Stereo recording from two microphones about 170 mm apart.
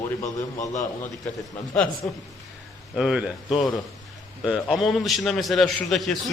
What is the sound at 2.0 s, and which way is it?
A man's voice, 5° left (ahead or behind).